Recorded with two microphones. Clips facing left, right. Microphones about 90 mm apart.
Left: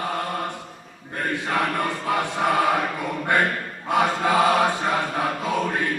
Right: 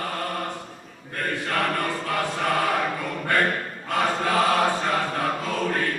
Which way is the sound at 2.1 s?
20° left (ahead or behind).